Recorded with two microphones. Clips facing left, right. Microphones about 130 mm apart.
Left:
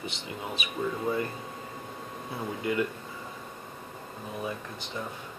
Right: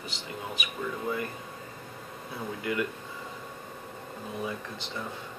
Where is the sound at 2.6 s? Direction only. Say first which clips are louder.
Left 2 dB; 25° left (ahead or behind).